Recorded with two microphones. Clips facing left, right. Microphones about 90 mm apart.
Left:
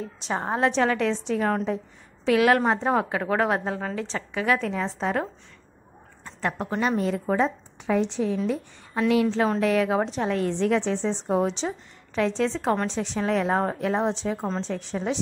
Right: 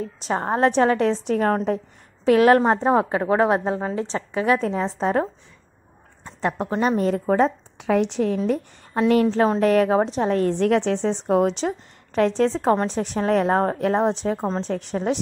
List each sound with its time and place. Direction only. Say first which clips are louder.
0.0 s a woman's voice: right 4 dB; 45° right (ahead or behind)
2.2 s speech: right 5 dB; 40° right (ahead or behind)
6.4 s a woman's voice: right 4 dB; 25° right (ahead or behind)
7.0 s a woman's voice: right 4 dB; 45° right (ahead or behind); by 8.4 s 60° right (ahead or behind)
8.5 s a woman's voice: right 4 dB; 45° right (ahead or behind)